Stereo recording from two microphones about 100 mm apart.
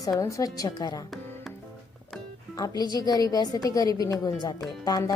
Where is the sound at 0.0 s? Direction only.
35° left (ahead or behind).